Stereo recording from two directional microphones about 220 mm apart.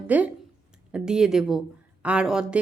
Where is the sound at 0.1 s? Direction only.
5° right (ahead or behind).